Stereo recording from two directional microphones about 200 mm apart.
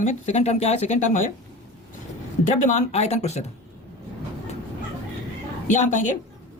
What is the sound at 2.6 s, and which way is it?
Speech, 35° left (ahead or behind).